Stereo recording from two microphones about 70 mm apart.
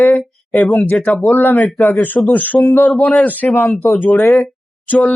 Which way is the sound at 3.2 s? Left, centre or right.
Left.